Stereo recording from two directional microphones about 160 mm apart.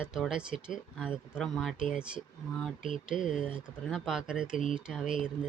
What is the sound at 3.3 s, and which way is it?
Speech, 5° right (ahead or behind).